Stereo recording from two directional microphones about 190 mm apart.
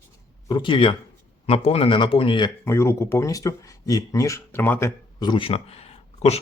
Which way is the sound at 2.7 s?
15° left (ahead or behind).